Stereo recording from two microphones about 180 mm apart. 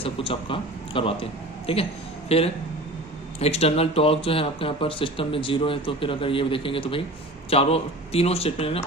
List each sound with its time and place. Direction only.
0.0 s speech: 30° left (ahead or behind)